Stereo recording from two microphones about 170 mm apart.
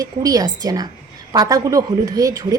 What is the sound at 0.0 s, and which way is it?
A woman's voice, 20° right (ahead or behind).